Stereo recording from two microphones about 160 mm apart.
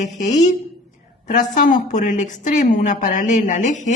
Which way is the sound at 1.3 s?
50° left (ahead or behind).